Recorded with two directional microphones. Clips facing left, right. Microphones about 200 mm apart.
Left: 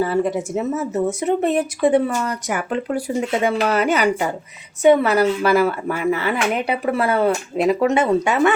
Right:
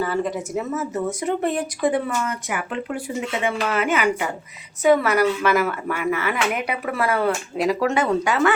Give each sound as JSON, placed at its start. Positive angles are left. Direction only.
{"t": 0.0, "sound": "speech", "side_deg": 25}
{"t": 2.5, "sound": "speech", "side_deg": 40}
{"t": 4.8, "sound": "speech", "side_deg": 25}